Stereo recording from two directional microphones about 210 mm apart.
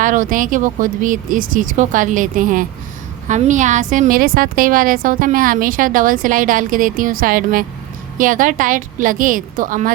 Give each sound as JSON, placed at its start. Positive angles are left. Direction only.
{"t": 0.0, "sound": "a woman's voice", "side_deg": -40}